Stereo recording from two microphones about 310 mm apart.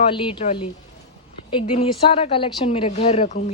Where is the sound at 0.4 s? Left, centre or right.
Centre.